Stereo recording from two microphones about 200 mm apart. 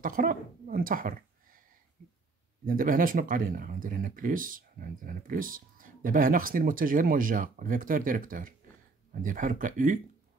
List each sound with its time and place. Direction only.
0.0 s speech: 45° right (ahead or behind)
2.6 s speech: 45° right (ahead or behind)